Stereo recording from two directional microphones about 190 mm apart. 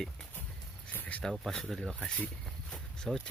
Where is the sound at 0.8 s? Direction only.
10° left (ahead or behind).